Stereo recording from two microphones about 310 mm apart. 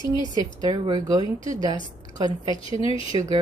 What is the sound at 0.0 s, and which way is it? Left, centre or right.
Speech, centre.